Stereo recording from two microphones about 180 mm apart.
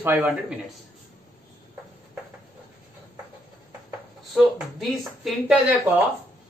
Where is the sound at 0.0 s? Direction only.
10° right (ahead or behind).